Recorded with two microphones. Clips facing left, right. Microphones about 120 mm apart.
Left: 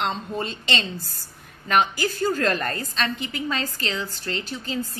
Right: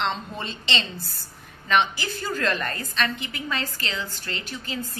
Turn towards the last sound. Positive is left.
turn(degrees=35)  # may be behind; listen again after turning